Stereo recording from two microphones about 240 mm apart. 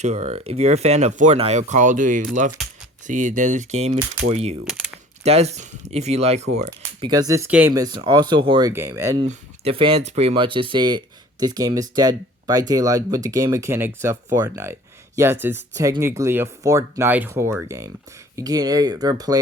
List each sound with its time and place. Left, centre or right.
0.0 s speech: right
2.6 s typing: centre
3.1 s speech: right
4.6 s speech: centre
5.2 s speech: right
7.1 s speech: centre
9.2 s speech: right